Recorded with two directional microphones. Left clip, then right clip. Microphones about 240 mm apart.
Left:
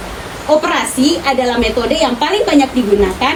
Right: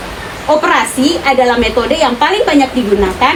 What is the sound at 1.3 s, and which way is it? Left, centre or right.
A woman's voice, centre.